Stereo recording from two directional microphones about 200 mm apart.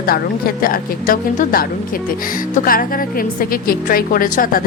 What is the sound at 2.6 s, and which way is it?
A woman's voice, 45° left (ahead or behind).